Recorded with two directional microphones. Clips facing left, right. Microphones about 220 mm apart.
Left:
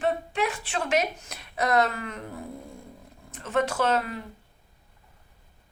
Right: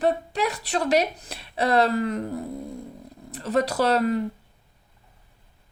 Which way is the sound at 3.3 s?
35° right (ahead or behind).